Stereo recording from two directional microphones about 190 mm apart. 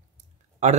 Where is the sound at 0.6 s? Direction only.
35° right (ahead or behind).